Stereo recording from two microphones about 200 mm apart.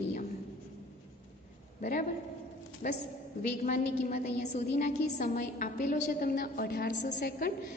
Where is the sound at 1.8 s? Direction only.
40° left (ahead or behind).